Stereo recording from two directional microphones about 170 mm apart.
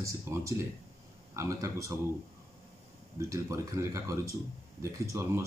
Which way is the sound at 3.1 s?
15° right (ahead or behind).